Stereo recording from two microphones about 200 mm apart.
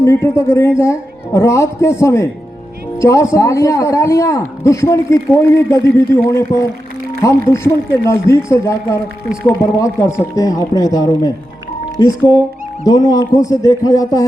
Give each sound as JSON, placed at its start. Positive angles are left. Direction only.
{"t": 0.0, "sound": "a man's voice", "side_deg": 15}